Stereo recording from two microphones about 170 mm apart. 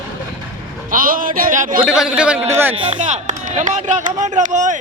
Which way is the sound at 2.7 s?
30° right (ahead or behind).